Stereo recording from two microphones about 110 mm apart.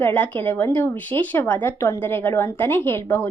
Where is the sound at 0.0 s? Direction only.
15° left (ahead or behind).